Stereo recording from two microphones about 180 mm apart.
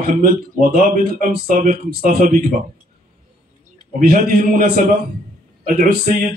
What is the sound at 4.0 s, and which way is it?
Speech, 55° right (ahead or behind).